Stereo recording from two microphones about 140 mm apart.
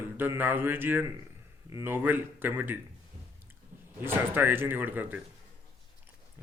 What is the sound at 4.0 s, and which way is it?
Speech, 15° right (ahead or behind).